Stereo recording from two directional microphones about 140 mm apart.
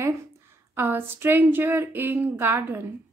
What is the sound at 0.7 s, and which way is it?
A woman's voice, 15° right (ahead or behind).